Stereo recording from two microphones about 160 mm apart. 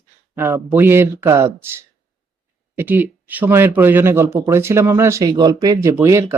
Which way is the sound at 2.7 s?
10° right (ahead or behind).